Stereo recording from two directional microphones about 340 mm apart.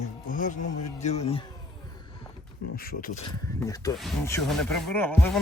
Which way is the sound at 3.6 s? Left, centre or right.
Centre.